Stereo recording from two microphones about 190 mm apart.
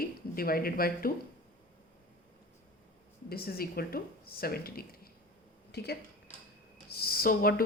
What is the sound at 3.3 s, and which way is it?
A woman's voice, 55° left (ahead or behind).